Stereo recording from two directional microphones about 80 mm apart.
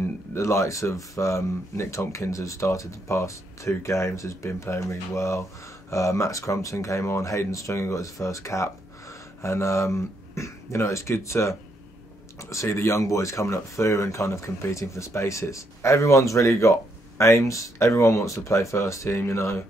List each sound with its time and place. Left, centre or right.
0.0 s speech: left